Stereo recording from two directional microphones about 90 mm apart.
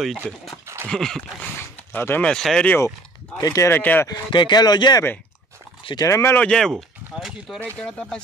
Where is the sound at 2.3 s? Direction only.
5° left (ahead or behind).